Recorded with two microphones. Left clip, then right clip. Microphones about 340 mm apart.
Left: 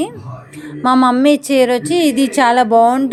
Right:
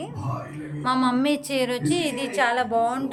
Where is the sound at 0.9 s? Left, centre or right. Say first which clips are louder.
Left 11 dB; centre.